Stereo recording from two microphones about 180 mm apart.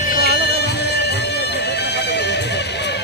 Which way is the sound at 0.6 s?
65° left (ahead or behind).